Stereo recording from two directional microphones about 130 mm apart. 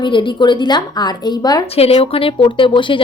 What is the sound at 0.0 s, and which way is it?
Speech, 40° left (ahead or behind).